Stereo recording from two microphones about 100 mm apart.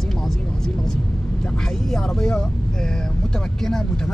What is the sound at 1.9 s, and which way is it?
Speech, 5° left (ahead or behind).